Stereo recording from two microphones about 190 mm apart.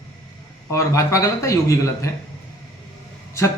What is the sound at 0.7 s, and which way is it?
A man's voice, 15° left (ahead or behind).